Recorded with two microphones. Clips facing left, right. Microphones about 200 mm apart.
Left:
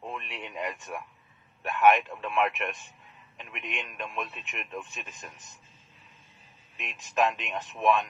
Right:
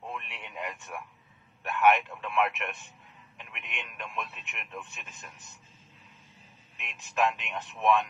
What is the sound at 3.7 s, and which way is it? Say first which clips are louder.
A man's voice: left 4 dB; 35° left (ahead or behind).